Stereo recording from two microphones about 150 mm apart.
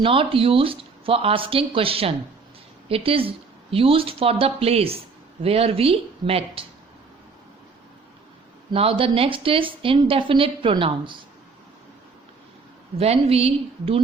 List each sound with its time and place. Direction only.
0.0 s a woman's voice: 35° right (ahead or behind)
8.7 s a woman's voice: 40° right (ahead or behind)
13.0 s a woman's voice: 40° right (ahead or behind)